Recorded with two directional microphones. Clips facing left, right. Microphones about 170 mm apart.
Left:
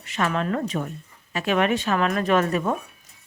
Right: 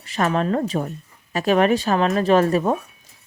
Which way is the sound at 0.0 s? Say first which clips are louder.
Right 4 dB; 35° right (ahead or behind).